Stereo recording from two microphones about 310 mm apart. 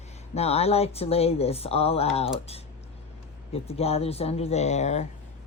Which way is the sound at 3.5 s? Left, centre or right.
Centre.